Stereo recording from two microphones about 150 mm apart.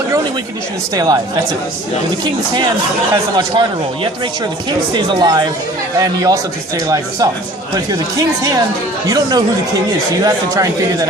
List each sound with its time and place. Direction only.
0.9 s speech: 25° right (ahead or behind)
3.3 s speech: 30° right (ahead or behind)
8.4 s speech: 25° right (ahead or behind)